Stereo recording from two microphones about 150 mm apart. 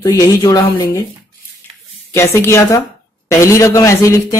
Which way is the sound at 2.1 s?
15° left (ahead or behind).